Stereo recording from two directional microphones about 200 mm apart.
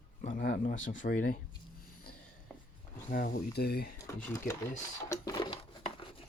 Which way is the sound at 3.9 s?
15° left (ahead or behind).